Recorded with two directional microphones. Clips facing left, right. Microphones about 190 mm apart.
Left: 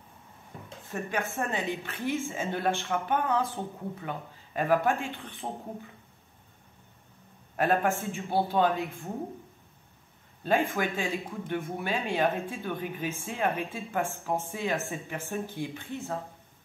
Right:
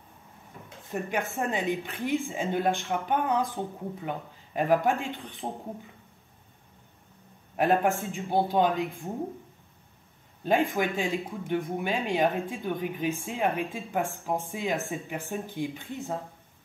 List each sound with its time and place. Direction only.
1.1 s speech: 15° right (ahead or behind)
7.5 s speech: 15° right (ahead or behind)
10.4 s speech: 15° right (ahead or behind)